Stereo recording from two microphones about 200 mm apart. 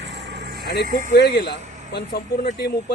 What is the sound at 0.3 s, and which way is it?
Vehicle, 60° right (ahead or behind).